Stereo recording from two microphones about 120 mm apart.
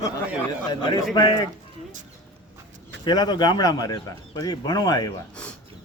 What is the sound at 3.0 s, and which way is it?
A man's voice, 35° left (ahead or behind).